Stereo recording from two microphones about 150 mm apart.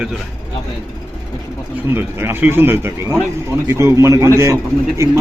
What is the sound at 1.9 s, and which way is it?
A man's voice, 15° right (ahead or behind).